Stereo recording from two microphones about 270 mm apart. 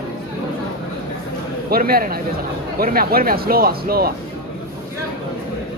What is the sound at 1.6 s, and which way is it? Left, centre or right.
Speech, right.